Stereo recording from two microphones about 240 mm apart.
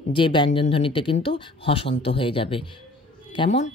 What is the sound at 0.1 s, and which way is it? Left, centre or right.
Speech, centre.